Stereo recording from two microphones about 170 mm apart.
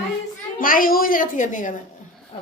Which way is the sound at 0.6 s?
55° left (ahead or behind).